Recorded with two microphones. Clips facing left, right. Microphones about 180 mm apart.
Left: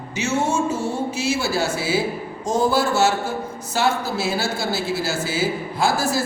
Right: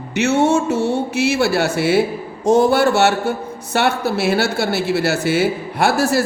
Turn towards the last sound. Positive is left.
turn(degrees=-70)  # may be behind; listen again after turning